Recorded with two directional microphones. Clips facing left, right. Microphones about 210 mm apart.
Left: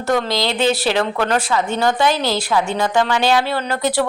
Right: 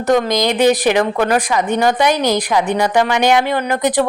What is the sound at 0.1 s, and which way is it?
A woman's voice, 15° right (ahead or behind).